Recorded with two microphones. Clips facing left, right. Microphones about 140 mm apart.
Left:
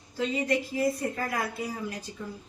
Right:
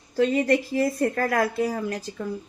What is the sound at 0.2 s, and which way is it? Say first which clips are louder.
A woman's voice: right 7 dB; 55° right (ahead or behind).